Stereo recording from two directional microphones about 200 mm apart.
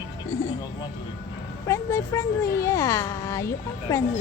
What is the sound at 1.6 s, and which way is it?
A child's voice, 15° left (ahead or behind).